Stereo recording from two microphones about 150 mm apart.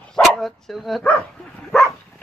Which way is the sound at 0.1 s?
Centre (ahead or behind).